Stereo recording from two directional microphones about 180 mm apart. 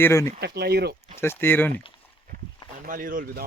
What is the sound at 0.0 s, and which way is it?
Speech, 15° left (ahead or behind).